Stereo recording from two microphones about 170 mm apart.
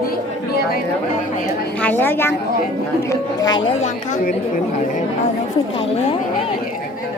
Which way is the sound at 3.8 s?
45° left (ahead or behind).